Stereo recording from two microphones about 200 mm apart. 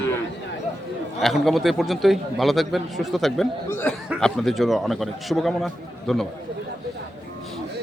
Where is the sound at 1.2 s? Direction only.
Centre (ahead or behind).